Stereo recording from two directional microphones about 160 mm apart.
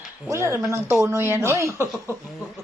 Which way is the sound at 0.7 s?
20° right (ahead or behind).